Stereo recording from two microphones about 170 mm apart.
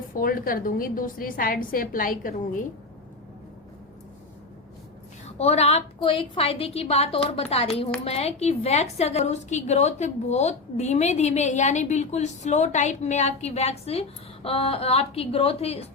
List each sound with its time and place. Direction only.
0.1 s a woman's voice: 55° left (ahead or behind)
5.2 s a woman's voice: 40° left (ahead or behind)